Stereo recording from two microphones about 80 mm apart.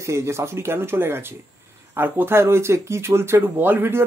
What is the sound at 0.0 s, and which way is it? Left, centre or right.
Speech, right.